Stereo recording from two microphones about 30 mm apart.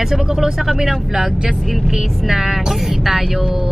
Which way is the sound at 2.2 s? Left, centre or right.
Centre.